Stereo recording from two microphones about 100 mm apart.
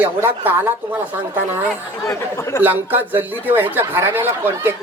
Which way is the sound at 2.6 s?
20° right (ahead or behind).